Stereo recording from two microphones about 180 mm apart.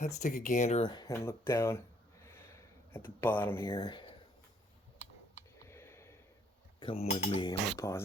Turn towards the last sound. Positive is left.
turn(degrees=15)  # may be behind; listen again after turning